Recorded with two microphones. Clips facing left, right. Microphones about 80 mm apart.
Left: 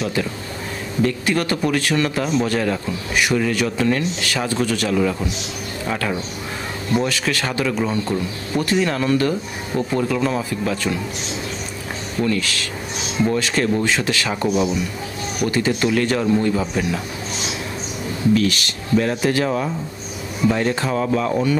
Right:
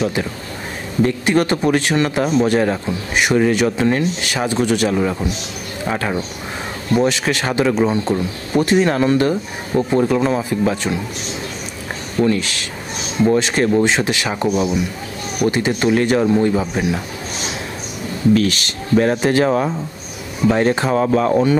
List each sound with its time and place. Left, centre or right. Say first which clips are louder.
1.0 s speech: right 4 dB; right
12.2 s speech: right 4 dB; right
18.9 s speech: right 4 dB; right